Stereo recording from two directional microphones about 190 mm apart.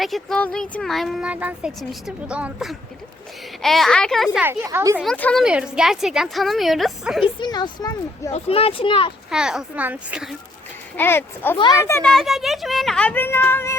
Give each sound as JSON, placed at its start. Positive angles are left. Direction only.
{"t": 0.0, "sound": "speech", "side_deg": 0}
{"t": 4.6, "sound": "speech", "side_deg": -15}
{"t": 5.0, "sound": "speech", "side_deg": 5}
{"t": 5.4, "sound": "speech", "side_deg": -5}
{"t": 7.4, "sound": "speech", "side_deg": 20}
{"t": 8.3, "sound": "speech", "side_deg": 30}
{"t": 9.3, "sound": "speech", "side_deg": -5}
{"t": 10.9, "sound": "a child's voice", "side_deg": 10}
{"t": 12.1, "sound": "speech", "side_deg": 0}